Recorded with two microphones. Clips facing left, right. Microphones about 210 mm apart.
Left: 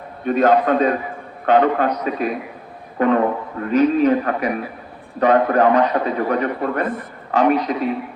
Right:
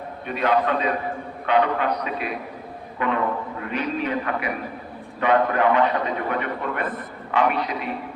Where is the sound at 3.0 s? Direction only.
40° left (ahead or behind).